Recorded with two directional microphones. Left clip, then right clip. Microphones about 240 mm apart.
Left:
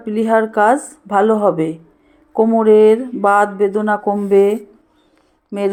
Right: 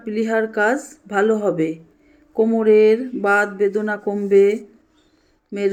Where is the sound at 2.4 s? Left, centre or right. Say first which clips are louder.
Left 4 dB; left.